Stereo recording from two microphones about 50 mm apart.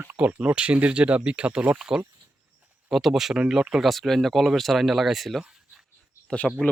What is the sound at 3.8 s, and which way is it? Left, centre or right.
Speech, centre.